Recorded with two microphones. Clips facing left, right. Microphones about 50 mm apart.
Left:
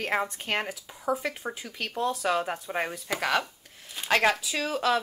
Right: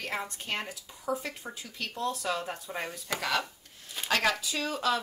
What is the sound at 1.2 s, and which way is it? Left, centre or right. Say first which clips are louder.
Speech: left 6 dB; left.